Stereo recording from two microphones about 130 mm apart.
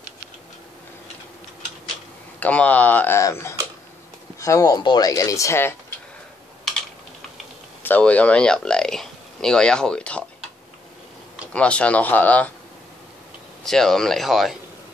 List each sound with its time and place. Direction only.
2.4 s speech: 10° left (ahead or behind)
7.8 s speech: 10° left (ahead or behind)
11.5 s speech: 10° left (ahead or behind)
13.7 s speech: 5° left (ahead or behind)